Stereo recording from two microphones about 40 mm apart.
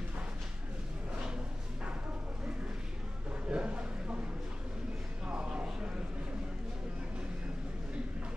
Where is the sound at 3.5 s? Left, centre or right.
Right.